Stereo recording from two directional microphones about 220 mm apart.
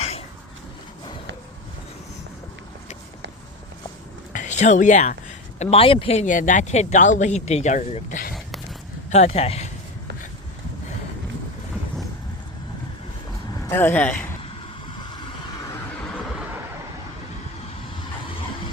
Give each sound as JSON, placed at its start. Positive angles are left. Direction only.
{"t": 4.3, "sound": "speech", "side_deg": 35}
{"t": 13.7, "sound": "speech", "side_deg": 10}